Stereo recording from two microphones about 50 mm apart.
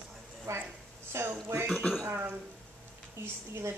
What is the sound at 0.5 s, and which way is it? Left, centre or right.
Speech, right.